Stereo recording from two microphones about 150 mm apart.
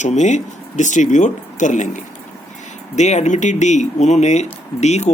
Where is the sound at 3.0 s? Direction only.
50° left (ahead or behind).